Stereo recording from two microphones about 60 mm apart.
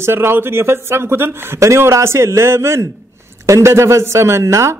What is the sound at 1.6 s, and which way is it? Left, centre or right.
Speech, right.